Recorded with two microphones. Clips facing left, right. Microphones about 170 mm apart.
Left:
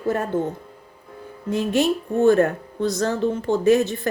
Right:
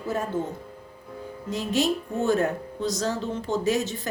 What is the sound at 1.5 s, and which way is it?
A woman's voice, 55° left (ahead or behind).